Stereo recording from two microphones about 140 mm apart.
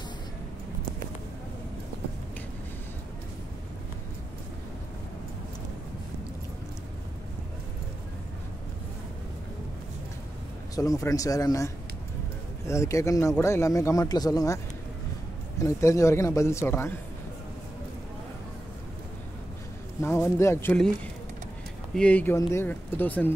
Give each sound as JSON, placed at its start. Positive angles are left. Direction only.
{"t": 10.8, "sound": "a man's voice", "side_deg": 25}
{"t": 15.6, "sound": "a man's voice", "side_deg": 20}
{"t": 20.0, "sound": "a man's voice", "side_deg": 20}
{"t": 20.7, "sound": "speech", "side_deg": 5}